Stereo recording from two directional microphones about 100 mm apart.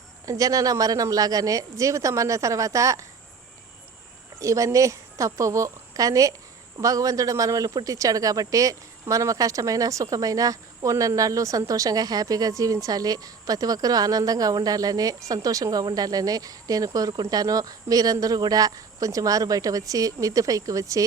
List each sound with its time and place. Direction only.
0.3 s speech: 35° right (ahead or behind)
4.4 s a woman's voice: 35° right (ahead or behind)